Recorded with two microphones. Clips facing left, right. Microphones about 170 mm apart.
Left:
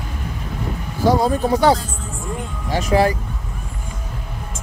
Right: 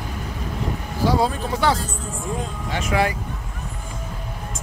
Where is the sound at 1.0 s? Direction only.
40° left (ahead or behind).